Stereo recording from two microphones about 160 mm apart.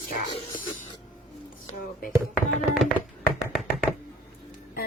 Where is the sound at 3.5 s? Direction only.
Centre (ahead or behind).